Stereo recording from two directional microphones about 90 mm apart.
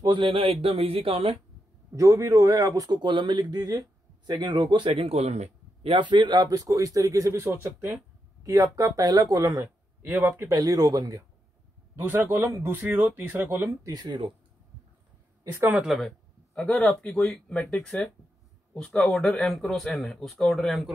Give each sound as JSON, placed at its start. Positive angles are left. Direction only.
{"t": 0.0, "sound": "a man's voice", "side_deg": -65}
{"t": 2.0, "sound": "speech", "side_deg": -35}
{"t": 3.0, "sound": "speech", "side_deg": -60}
{"t": 4.3, "sound": "speech", "side_deg": -55}
{"t": 5.8, "sound": "speech", "side_deg": -80}
{"t": 6.5, "sound": "speech", "side_deg": -40}
{"t": 8.5, "sound": "speech", "side_deg": -40}
{"t": 10.0, "sound": "speech", "side_deg": -25}
{"t": 11.9, "sound": "speech", "side_deg": -25}
{"t": 13.8, "sound": "speech", "side_deg": -50}
{"t": 15.5, "sound": "speech", "side_deg": -25}
{"t": 15.8, "sound": "speech", "side_deg": 0}
{"t": 19.1, "sound": "speech", "side_deg": 5}